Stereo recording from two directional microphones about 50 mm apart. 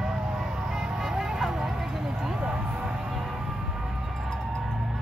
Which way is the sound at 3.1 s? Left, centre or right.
Centre.